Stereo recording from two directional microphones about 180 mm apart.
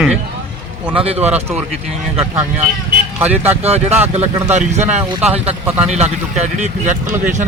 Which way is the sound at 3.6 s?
35° right (ahead or behind).